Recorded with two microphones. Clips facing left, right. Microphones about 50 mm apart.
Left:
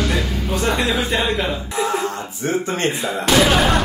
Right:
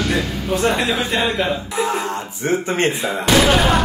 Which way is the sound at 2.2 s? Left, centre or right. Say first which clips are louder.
Right 1 dB; right.